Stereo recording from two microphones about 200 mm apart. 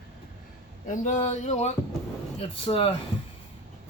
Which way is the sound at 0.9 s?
35° left (ahead or behind).